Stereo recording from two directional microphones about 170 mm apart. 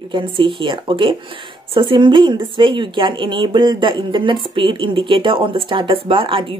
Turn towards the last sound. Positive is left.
turn(degrees=-30)  # may be behind; listen again after turning